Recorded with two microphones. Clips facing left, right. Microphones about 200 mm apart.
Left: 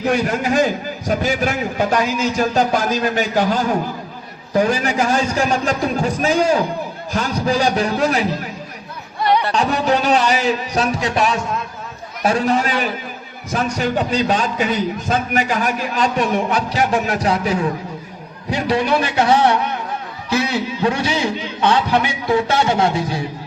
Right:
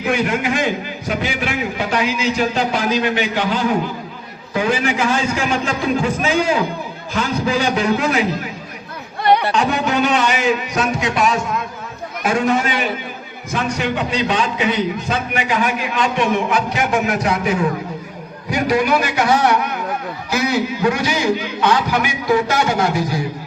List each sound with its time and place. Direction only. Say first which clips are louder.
0.0 s a man's voice: even; 40° left (ahead or behind)
9.5 s a man's voice: left 1 dB; 35° left (ahead or behind)